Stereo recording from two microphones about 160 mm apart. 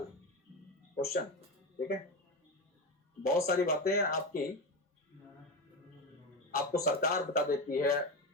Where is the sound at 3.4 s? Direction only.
70° left (ahead or behind).